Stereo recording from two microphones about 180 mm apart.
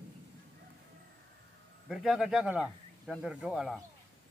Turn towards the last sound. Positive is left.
turn(degrees=-5)  # may be behind; listen again after turning